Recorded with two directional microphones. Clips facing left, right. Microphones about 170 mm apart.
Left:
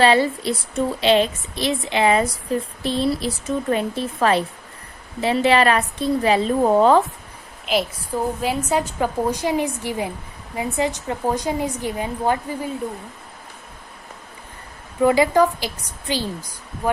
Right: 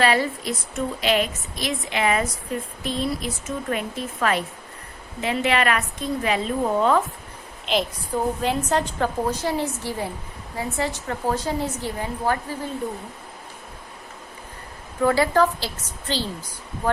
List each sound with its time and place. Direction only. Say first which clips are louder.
0.0 s a woman's voice: left 4 dB; 30° left (ahead or behind)
7.6 s a woman's voice: left 2 dB; 5° left (ahead or behind)
15.0 s a woman's voice: left 3 dB; 15° left (ahead or behind)